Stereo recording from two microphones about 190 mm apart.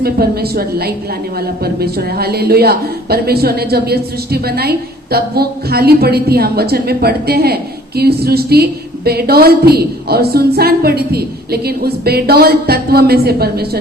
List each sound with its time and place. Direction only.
0.0 s a woman's voice: 55° right (ahead or behind)